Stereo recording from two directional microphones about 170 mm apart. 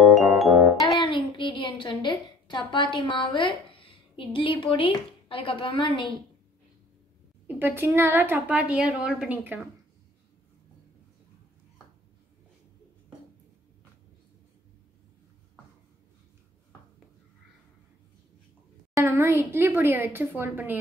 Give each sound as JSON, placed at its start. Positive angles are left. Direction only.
{"t": 0.1, "sound": "music", "side_deg": 0}
{"t": 1.0, "sound": "a woman's voice", "side_deg": 30}
{"t": 7.4, "sound": "a woman's voice", "side_deg": -10}
{"t": 18.9, "sound": "a woman's voice", "side_deg": -15}